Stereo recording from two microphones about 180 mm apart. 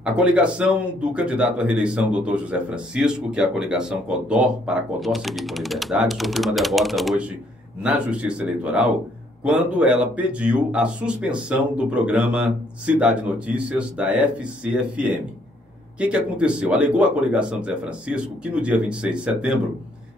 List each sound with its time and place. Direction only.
0.0 s speech: 5° right (ahead or behind)